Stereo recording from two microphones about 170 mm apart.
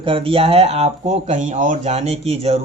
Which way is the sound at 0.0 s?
30° right (ahead or behind).